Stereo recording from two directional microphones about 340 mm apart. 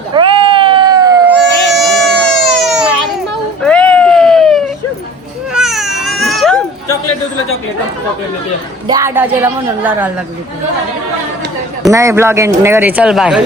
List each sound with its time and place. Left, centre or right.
0.1 s a sound: centre
1.7 s baby cry: centre
3.6 s a sound: centre
5.5 s baby cry: centre
8.9 s speech: centre
11.8 s speech: centre